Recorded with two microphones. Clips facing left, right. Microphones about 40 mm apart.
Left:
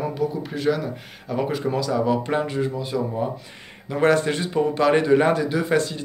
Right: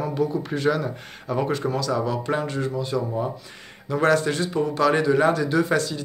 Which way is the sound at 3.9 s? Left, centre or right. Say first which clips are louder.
Left 1 dB; left.